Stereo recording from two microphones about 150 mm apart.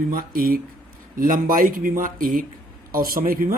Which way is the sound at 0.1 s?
70° right (ahead or behind).